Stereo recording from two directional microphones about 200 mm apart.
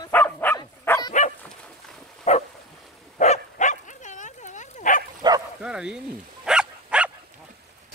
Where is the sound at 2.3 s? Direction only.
35° left (ahead or behind).